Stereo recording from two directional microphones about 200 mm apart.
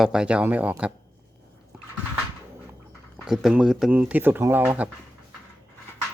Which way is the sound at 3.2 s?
Centre (ahead or behind).